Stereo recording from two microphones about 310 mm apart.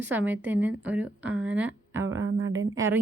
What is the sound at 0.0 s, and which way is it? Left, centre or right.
Speech, centre.